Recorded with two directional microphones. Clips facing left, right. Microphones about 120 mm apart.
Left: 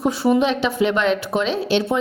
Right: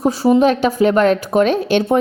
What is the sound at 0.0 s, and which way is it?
A woman's voice, 40° right (ahead or behind).